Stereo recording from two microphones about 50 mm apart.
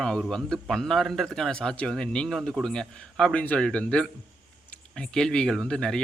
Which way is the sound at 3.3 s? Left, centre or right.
Left.